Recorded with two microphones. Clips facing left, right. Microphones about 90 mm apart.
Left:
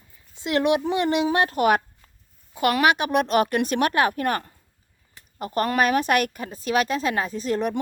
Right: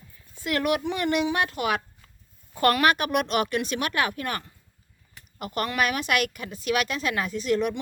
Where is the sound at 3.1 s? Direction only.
35° left (ahead or behind).